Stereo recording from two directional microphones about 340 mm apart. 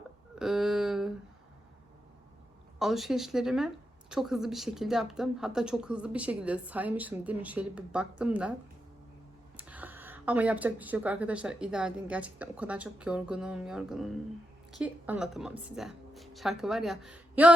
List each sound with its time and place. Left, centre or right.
0.3 s a sound: centre
2.7 s speech: centre
9.6 s speech: centre